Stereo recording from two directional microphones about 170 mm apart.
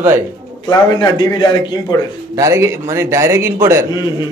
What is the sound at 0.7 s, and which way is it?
Speech, 25° left (ahead or behind).